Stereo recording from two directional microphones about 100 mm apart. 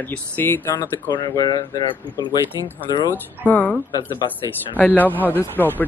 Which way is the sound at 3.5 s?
15° left (ahead or behind).